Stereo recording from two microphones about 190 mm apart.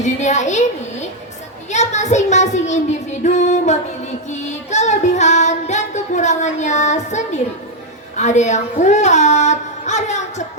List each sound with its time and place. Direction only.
0.0 s child singing: 40° left (ahead or behind)
8.1 s a woman's voice: 40° left (ahead or behind)